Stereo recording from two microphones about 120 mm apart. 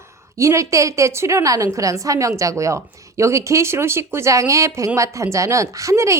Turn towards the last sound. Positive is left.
turn(degrees=-25)  # may be behind; listen again after turning